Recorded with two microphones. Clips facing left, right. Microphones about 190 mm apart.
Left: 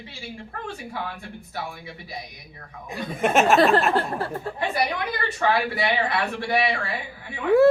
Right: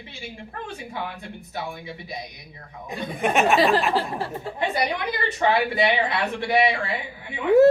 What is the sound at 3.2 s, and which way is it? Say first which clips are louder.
Speech: left 1 dB; centre (ahead or behind).